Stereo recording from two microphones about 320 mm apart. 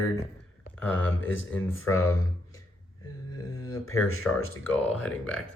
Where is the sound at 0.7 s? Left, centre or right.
Centre.